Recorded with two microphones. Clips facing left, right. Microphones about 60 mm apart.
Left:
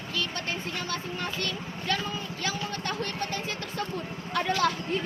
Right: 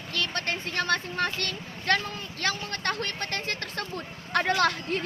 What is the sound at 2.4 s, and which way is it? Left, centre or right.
Vehicle, right.